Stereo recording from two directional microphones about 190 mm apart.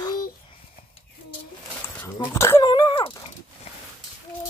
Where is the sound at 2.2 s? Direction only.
15° left (ahead or behind).